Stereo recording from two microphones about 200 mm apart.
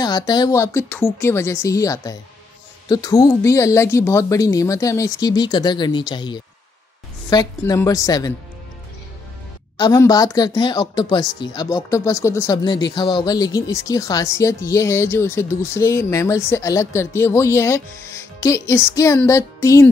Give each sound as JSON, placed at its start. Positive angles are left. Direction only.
{"t": 0.0, "sound": "speech", "side_deg": 20}
{"t": 9.8, "sound": "speech", "side_deg": 20}